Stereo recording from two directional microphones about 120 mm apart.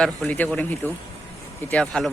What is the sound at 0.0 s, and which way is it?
Speech, 10° left (ahead or behind).